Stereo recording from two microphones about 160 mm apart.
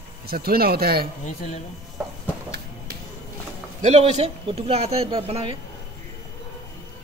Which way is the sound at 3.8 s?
40° right (ahead or behind).